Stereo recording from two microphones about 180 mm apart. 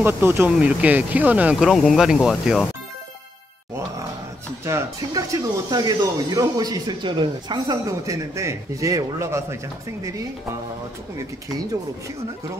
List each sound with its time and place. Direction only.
0.0 s speech: 15° right (ahead or behind)
4.6 s speech: 15° right (ahead or behind)